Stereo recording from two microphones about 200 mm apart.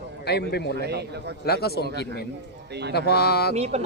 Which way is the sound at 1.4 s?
50° left (ahead or behind).